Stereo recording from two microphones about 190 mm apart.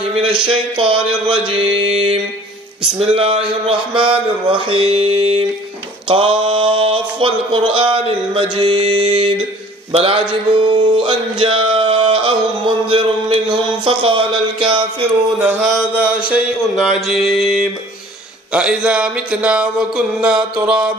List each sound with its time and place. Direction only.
0.1 s mantra: 30° right (ahead or behind)
15.3 s mantra: 10° right (ahead or behind)
16.3 s speech: 5° right (ahead or behind)